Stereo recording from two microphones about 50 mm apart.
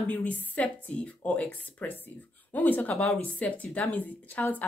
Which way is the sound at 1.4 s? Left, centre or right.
Left.